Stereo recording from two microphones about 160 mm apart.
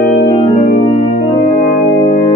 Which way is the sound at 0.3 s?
40° left (ahead or behind).